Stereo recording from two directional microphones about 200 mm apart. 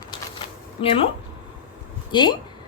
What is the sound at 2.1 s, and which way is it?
Speech, 20° left (ahead or behind).